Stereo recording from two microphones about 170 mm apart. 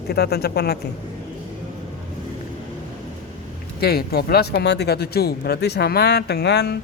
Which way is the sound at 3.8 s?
65° left (ahead or behind).